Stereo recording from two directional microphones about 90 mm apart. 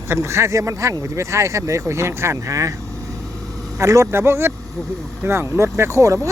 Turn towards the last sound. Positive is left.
turn(degrees=-35)  # may be behind; listen again after turning